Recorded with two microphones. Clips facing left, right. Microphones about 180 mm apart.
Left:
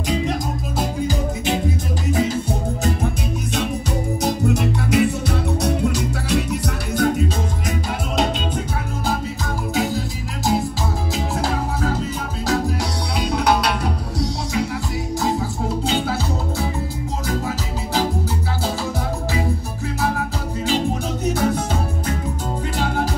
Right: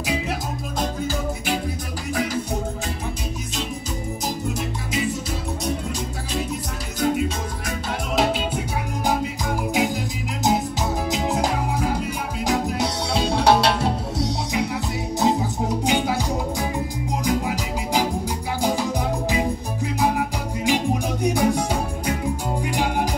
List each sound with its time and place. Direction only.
0.0 s music: 10° right (ahead or behind)
1.0 s music: 20° left (ahead or behind)
4.2 s music: 65° left (ahead or behind)
6.3 s music: 70° left (ahead or behind)
9.8 s music: 15° right (ahead or behind)
20.0 s music: 15° right (ahead or behind)